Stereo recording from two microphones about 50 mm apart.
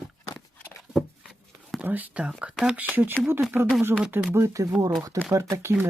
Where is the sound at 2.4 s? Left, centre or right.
Right.